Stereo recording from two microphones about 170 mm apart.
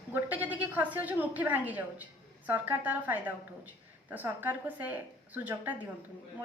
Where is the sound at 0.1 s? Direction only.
10° right (ahead or behind).